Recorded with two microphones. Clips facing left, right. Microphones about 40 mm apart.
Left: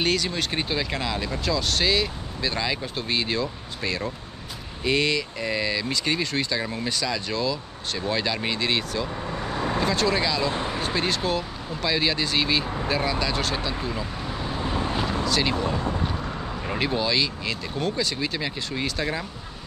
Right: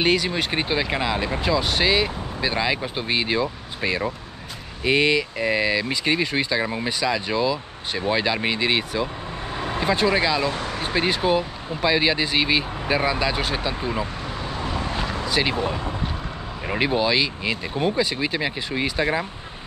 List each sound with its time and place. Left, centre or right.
0.0 s speech: centre
15.2 s speech: centre